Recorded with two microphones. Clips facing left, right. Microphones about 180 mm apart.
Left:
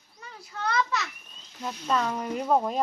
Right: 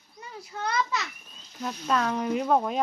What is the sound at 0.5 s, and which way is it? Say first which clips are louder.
Speech: even; 15° right (ahead or behind).